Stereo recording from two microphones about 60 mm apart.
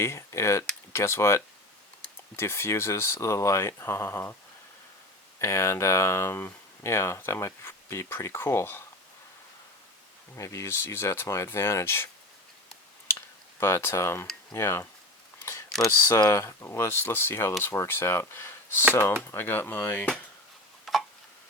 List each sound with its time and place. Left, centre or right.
0.0 s a sound: left
0.9 s speech: left
5.4 s speech: left
10.3 s speech: left
13.1 s cutlery: left
14.5 s speech: left
16.0 s speech: left
20.9 s a sound: centre